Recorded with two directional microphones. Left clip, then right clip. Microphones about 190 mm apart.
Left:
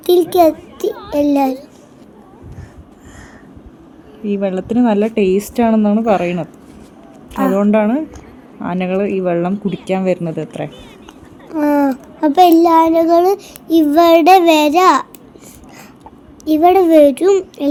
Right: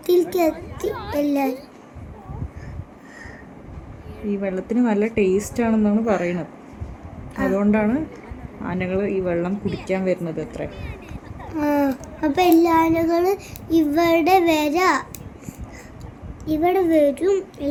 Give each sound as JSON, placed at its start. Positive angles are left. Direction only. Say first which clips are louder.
{"t": 0.0, "sound": "a child's voice", "louder": "left 8 dB", "side_deg": 35}
{"t": 4.3, "sound": "speech", "louder": "left 7 dB", "side_deg": 30}
{"t": 11.5, "sound": "a sound", "louder": "left 6 dB", "side_deg": 30}
{"t": 12.2, "sound": "a child's voice", "louder": "left 8 dB", "side_deg": 30}
{"t": 16.4, "sound": "a child's voice", "louder": "left 9 dB", "side_deg": 50}